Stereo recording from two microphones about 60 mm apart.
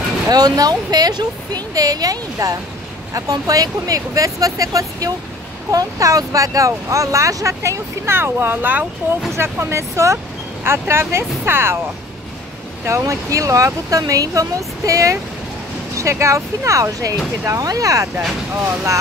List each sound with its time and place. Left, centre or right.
0.3 s speech: right
9.4 s speech: right
10.6 s speech: right
12.8 s speech: right
17.5 s speech: right